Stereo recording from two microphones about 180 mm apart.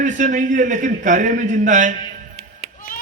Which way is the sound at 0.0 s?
45° right (ahead or behind).